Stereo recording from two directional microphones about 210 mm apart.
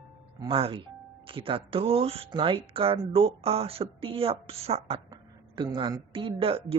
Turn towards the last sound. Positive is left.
turn(degrees=-25)  # may be behind; listen again after turning